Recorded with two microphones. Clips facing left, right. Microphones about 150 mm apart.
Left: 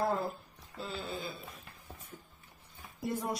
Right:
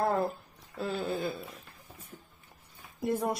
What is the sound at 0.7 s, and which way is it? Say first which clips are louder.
Speech: right 7 dB; 55° right (ahead or behind).